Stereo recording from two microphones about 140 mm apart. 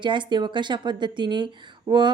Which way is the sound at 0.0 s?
35° right (ahead or behind).